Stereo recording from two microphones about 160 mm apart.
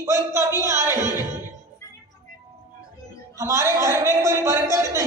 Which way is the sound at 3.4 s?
20° right (ahead or behind).